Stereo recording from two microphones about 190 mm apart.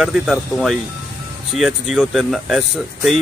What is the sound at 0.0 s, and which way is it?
Speech, centre (ahead or behind).